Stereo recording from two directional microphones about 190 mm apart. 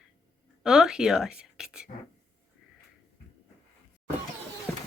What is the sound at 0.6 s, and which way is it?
Speech, centre (ahead or behind).